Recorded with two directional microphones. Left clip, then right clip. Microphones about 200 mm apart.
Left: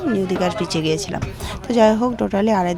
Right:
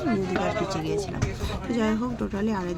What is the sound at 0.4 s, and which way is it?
A woman's voice, 35° left (ahead or behind).